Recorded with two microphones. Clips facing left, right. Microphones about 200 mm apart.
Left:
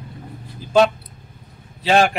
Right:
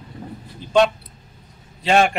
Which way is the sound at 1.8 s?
Centre (ahead or behind).